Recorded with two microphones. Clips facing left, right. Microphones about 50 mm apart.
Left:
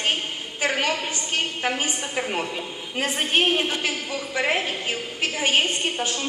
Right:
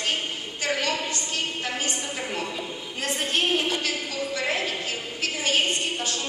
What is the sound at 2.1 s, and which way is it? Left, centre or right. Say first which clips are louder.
A woman's voice: left 4 dB; left.